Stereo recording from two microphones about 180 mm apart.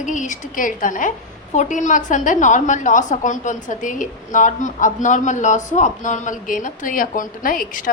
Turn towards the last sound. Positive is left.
turn(degrees=50)  # may be behind; listen again after turning